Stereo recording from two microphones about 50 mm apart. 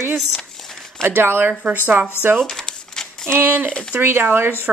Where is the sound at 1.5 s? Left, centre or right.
Right.